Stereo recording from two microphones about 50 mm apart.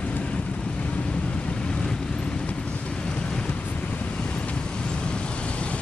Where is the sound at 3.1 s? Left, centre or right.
Centre.